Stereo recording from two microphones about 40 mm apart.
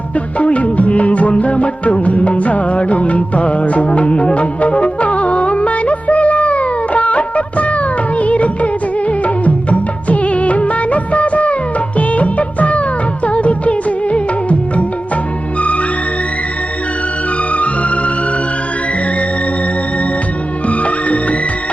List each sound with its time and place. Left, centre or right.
0.3 s music: left
11.9 s music of bollywood: left
13.2 s music: left
17.5 s music: left
20.7 s music: left